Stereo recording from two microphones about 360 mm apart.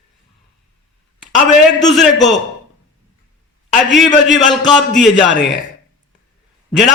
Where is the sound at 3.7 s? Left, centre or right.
Centre.